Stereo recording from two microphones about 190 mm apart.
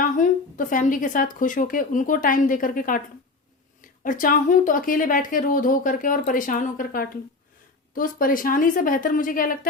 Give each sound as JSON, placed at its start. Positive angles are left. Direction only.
{"t": 0.0, "sound": "speech", "side_deg": 45}